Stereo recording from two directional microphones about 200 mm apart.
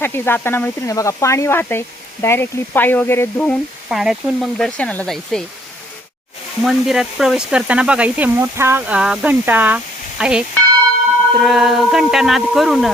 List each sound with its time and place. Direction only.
0.0 s speech: 10° left (ahead or behind)
6.6 s speech: centre (ahead or behind)